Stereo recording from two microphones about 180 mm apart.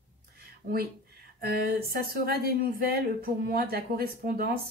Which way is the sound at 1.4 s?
60° right (ahead or behind).